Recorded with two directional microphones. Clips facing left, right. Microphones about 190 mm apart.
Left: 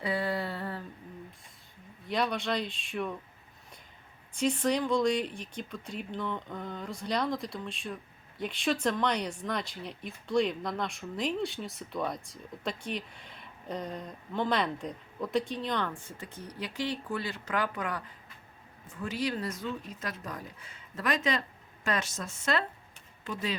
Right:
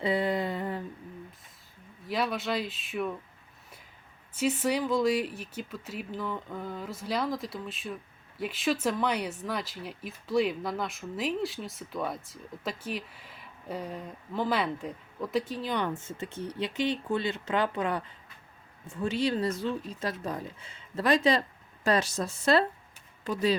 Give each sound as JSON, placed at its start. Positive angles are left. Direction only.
{"t": 0.0, "sound": "a sound", "side_deg": -20}
{"t": 2.0, "sound": "speech", "side_deg": -5}
{"t": 4.4, "sound": "speech", "side_deg": -5}
{"t": 15.8, "sound": "speech", "side_deg": -20}